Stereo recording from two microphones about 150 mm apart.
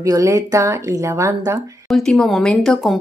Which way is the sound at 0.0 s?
20° right (ahead or behind).